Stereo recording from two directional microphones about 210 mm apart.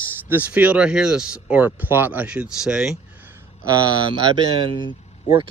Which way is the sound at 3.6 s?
15° right (ahead or behind).